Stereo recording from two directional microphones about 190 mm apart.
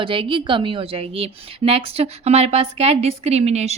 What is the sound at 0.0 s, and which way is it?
A woman's voice, 25° right (ahead or behind).